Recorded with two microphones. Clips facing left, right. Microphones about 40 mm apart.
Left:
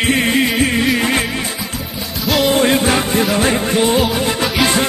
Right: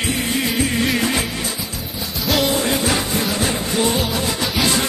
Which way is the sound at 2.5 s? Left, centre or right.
Left.